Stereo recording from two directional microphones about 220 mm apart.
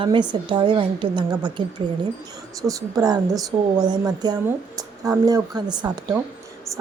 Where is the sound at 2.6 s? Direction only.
15° right (ahead or behind).